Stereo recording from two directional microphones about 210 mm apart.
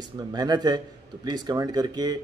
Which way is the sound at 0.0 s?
20° right (ahead or behind).